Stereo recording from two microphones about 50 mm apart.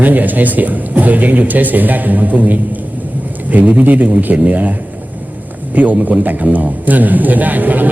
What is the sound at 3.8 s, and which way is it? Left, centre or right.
Speech, right.